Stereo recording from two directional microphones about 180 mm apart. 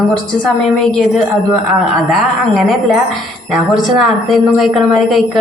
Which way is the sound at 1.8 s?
Centre (ahead or behind).